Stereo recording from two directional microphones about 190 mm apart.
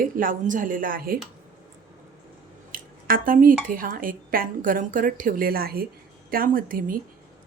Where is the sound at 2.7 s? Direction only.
45° right (ahead or behind).